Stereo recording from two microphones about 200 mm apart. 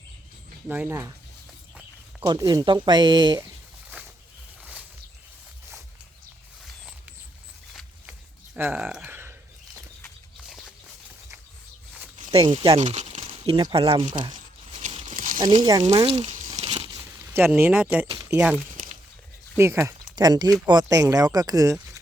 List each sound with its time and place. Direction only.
0.7 s speech: 10° right (ahead or behind)
2.2 s speech: 20° right (ahead or behind)
4.6 s a sound: 5° right (ahead or behind)
6.7 s mechanisms: 5° right (ahead or behind)
7.7 s a sound: centre (ahead or behind)
8.5 s speech: 10° right (ahead or behind)
10.5 s walk: centre (ahead or behind)
12.3 s speech: 25° right (ahead or behind)
12.8 s speech: 35° right (ahead or behind)
14.3 s tearing: 40° right (ahead or behind)
15.8 s speech: 30° right (ahead or behind)
16.6 s a sound: 25° right (ahead or behind); by 18.1 s 10° right (ahead or behind)
18.1 s speech: 20° right (ahead or behind)